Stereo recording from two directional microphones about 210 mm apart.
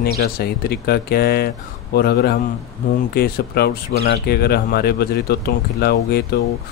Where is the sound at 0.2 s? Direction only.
50° left (ahead or behind).